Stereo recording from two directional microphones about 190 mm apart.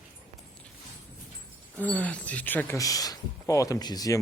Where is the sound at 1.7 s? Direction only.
10° left (ahead or behind).